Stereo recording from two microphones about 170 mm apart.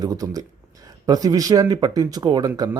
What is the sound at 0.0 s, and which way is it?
A man's voice, 20° right (ahead or behind).